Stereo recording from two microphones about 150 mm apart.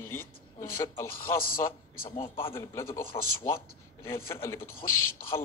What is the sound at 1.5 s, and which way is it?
Speech, 70° left (ahead or behind).